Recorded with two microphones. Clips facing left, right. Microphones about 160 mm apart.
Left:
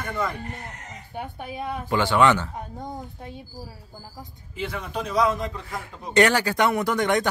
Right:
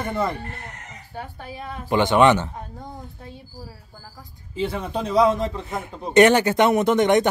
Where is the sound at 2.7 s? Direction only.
20° left (ahead or behind).